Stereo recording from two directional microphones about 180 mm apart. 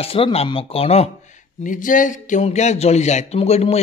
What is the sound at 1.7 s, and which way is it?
Speech, 45° left (ahead or behind).